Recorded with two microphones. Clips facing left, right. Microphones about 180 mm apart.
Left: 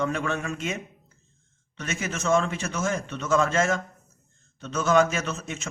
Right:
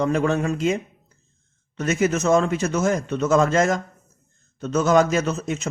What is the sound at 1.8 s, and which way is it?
A man's voice, 40° right (ahead or behind).